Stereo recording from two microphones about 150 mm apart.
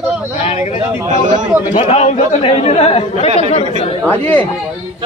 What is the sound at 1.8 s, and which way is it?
Speech, 40° left (ahead or behind).